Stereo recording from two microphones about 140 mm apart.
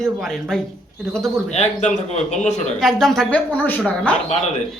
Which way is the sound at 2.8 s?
5° left (ahead or behind).